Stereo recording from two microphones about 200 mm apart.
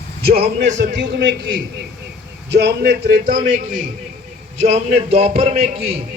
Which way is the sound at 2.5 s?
55° right (ahead or behind).